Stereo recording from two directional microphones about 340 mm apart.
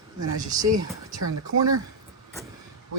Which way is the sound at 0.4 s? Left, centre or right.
Centre.